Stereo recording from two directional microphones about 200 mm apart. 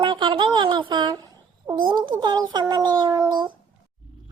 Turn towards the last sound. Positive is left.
turn(degrees=-20)  # may be behind; listen again after turning